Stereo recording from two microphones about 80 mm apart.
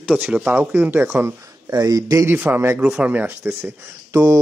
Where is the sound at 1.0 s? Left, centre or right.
Right.